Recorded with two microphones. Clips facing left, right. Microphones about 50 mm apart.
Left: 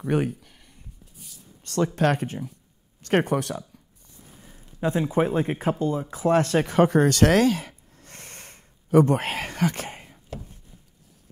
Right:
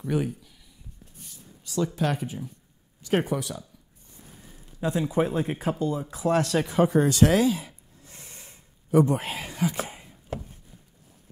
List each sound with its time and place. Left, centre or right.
0.1 s a sound: left
2.0 s speech: left
4.7 s speech: left